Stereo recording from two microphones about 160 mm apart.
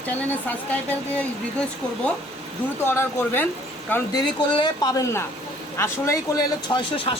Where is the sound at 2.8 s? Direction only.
15° left (ahead or behind).